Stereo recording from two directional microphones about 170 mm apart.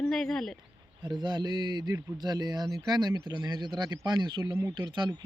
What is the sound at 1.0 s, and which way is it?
Speech, 25° right (ahead or behind).